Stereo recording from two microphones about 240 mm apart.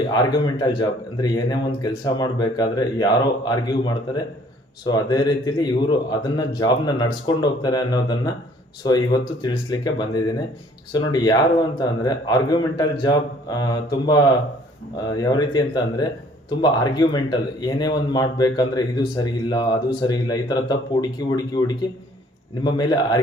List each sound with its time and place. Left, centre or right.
0.1 s speech: centre
22.6 s speech: centre